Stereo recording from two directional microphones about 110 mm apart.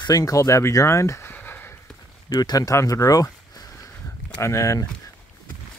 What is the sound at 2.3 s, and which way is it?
Speech, 35° left (ahead or behind).